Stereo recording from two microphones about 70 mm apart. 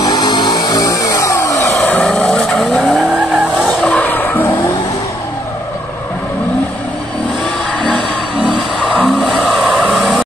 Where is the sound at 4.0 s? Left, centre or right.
Left.